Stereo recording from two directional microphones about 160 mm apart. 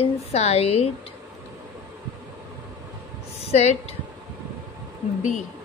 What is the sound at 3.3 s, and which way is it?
Speech, 40° left (ahead or behind).